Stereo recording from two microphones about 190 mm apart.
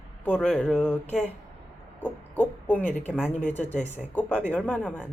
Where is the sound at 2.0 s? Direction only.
10° left (ahead or behind).